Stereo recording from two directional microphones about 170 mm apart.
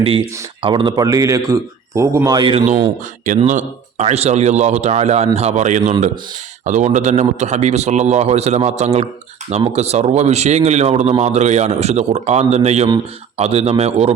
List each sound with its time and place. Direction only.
0.6 s a man's voice: 30° right (ahead or behind)
3.2 s a man's voice: 45° right (ahead or behind)